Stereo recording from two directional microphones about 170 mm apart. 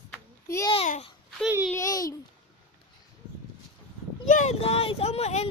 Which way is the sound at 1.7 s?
20° left (ahead or behind).